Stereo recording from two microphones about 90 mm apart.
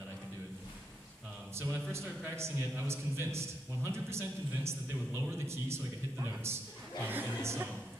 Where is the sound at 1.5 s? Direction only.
25° right (ahead or behind).